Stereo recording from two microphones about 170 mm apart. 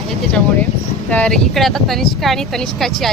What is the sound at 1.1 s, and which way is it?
Speech, 5° left (ahead or behind).